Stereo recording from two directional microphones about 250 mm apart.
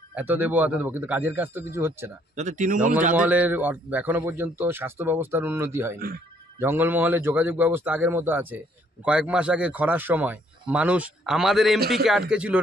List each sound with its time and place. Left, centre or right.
0.1 s a man's voice: centre
2.3 s speech: right
3.2 s a man's voice: centre